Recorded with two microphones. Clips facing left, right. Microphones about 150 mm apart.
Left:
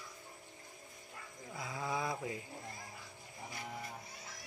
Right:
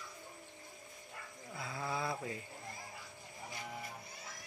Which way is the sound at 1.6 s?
15° left (ahead or behind).